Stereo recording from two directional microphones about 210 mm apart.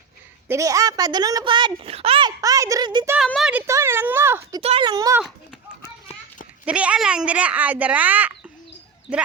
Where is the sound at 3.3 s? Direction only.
Centre (ahead or behind).